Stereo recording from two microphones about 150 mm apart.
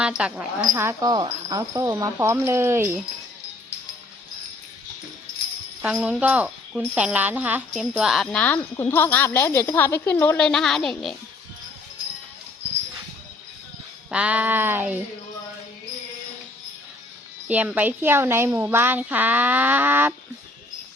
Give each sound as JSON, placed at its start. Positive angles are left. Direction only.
{"t": 0.0, "sound": "speech", "side_deg": -5}
{"t": 0.8, "sound": "speech", "side_deg": -20}
{"t": 5.8, "sound": "speech", "side_deg": -10}
{"t": 7.7, "sound": "jingle bell", "side_deg": -5}
{"t": 8.7, "sound": "speech", "side_deg": 15}
{"t": 14.1, "sound": "speech", "side_deg": -10}
{"t": 17.5, "sound": "speech", "side_deg": -10}